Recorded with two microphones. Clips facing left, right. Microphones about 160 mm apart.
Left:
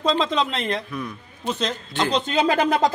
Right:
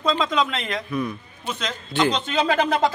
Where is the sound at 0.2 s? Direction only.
30° left (ahead or behind).